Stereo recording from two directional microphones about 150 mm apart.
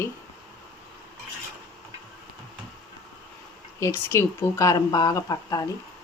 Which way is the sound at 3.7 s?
20° left (ahead or behind).